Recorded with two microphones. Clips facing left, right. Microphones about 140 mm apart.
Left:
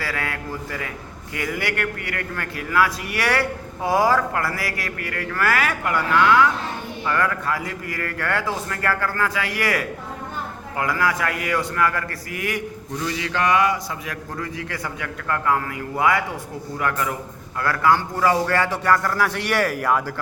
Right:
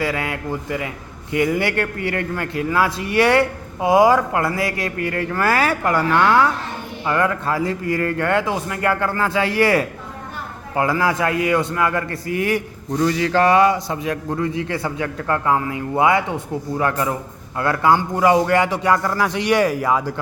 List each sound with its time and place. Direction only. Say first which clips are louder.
0.0 s a man's voice: right 5 dB; 20° right (ahead or behind); by 6.5 s 40° right (ahead or behind)
7.0 s a man's voice: right 3 dB; 25° right (ahead or behind)
13.0 s a man's voice: right 8 dB; 45° right (ahead or behind); by 20.1 s 10° right (ahead or behind)